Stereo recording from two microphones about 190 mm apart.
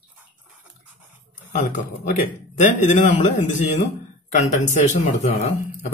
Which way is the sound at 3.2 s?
40° left (ahead or behind).